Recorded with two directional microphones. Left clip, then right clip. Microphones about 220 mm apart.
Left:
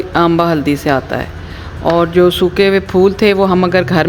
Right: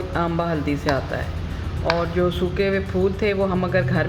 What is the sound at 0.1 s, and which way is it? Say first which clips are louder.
Speech: left 12 dB; 55° left (ahead or behind).